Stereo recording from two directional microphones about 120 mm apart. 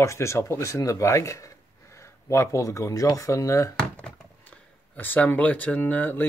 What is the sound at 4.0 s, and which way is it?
Speech, 10° left (ahead or behind).